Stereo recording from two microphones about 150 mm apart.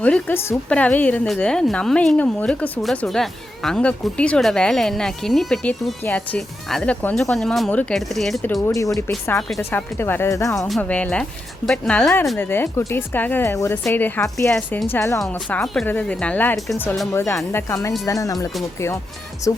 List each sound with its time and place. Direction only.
0.0 s a woman's voice: 10° left (ahead or behind)
8.6 s a woman's voice: 20° left (ahead or behind)
10.6 s a woman's voice: 5° left (ahead or behind)
12.4 s a woman's voice: 15° left (ahead or behind)
19.5 s speech: 20° left (ahead or behind)